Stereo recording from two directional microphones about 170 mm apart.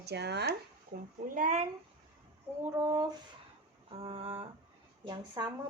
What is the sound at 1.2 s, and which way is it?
Speech, 50° right (ahead or behind).